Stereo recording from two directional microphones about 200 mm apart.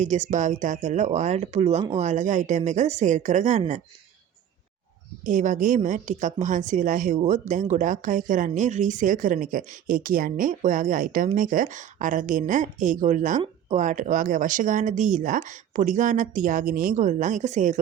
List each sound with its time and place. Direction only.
0.0 s a woman's voice: 35° right (ahead or behind)
5.2 s a woman's voice: 40° right (ahead or behind)